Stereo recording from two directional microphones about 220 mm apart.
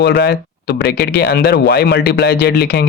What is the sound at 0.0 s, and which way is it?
Speech, 50° left (ahead or behind).